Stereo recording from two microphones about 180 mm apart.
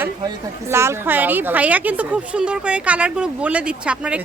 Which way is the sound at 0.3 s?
15° right (ahead or behind).